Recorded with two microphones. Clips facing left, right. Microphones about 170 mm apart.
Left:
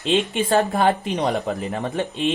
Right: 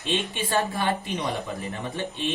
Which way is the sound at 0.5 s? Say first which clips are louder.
Left 6 dB; 60° left (ahead or behind).